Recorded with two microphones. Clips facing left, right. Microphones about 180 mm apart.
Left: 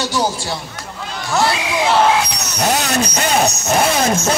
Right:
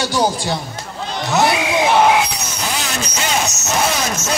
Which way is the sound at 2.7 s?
40° left (ahead or behind).